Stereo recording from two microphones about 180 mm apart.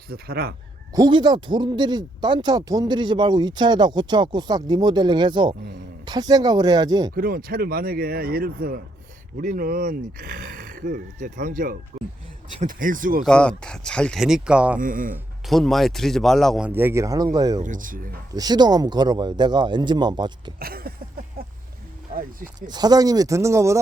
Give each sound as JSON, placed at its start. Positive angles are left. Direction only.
{"t": 0.1, "sound": "speech", "side_deg": -60}
{"t": 0.9, "sound": "speech", "side_deg": -25}
{"t": 7.1, "sound": "speech", "side_deg": -55}
{"t": 13.2, "sound": "a man's voice", "side_deg": 5}
{"t": 14.8, "sound": "speech", "side_deg": -50}
{"t": 15.4, "sound": "a man's voice", "side_deg": 0}
{"t": 17.6, "sound": "speech", "side_deg": -45}
{"t": 18.3, "sound": "speech", "side_deg": -20}
{"t": 20.6, "sound": "speech", "side_deg": -55}
{"t": 22.1, "sound": "speech", "side_deg": -50}
{"t": 22.7, "sound": "speech", "side_deg": -20}